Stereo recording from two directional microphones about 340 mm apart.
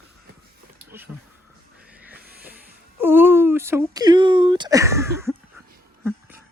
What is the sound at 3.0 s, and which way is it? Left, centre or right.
Speech, centre.